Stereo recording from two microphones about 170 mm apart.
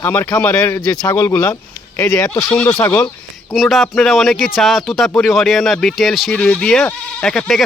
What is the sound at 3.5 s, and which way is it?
Speech, centre (ahead or behind).